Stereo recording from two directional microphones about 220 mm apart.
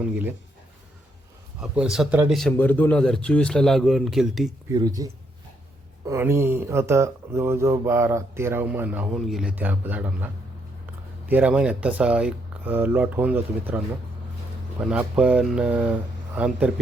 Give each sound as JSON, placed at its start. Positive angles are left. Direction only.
{"t": 0.0, "sound": "speech", "side_deg": -5}
{"t": 1.7, "sound": "a man's voice", "side_deg": -5}
{"t": 2.5, "sound": "a man's voice", "side_deg": 10}
{"t": 4.7, "sound": "a man's voice", "side_deg": -15}